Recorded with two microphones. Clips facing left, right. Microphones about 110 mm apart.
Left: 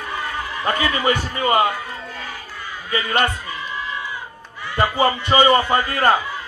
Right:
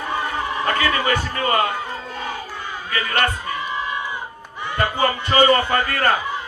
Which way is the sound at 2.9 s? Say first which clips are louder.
Left 2 dB; 20° left (ahead or behind).